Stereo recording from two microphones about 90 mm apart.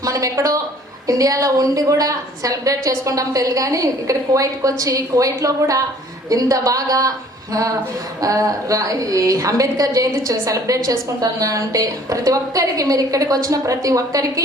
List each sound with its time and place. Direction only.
0.0 s a woman's voice: 40° right (ahead or behind)